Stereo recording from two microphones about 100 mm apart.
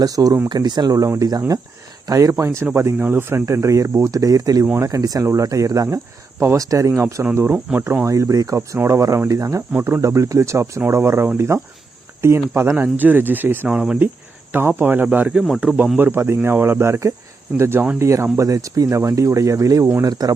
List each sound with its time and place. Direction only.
0.0 s speech: 40° right (ahead or behind)
2.3 s speech: 25° right (ahead or behind)
13.7 s speech: 10° right (ahead or behind)
15.4 s speech: centre (ahead or behind)
16.0 s speech: 20° right (ahead or behind); by 20.3 s 40° right (ahead or behind)